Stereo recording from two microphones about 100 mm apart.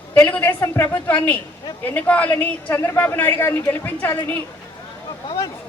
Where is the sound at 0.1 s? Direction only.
20° left (ahead or behind).